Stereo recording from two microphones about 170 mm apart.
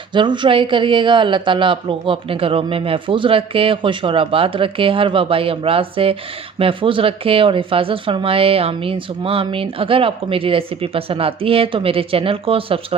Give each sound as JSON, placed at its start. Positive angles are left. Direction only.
{"t": 0.1, "sound": "speech", "side_deg": -30}